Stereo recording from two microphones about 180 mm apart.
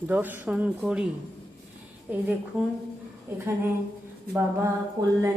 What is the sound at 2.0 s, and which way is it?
A woman's voice, 10° right (ahead or behind).